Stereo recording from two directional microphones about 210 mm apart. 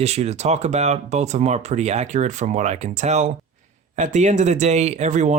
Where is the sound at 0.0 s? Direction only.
30° right (ahead or behind).